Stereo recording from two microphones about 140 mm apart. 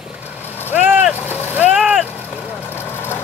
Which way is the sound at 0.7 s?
10° right (ahead or behind).